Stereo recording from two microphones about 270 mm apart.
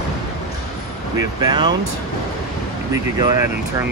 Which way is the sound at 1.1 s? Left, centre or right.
Centre.